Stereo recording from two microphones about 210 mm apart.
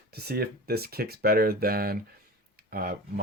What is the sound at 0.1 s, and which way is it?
Speech, 50° right (ahead or behind).